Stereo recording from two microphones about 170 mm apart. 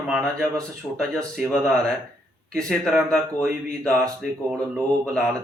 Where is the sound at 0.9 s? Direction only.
Centre (ahead or behind).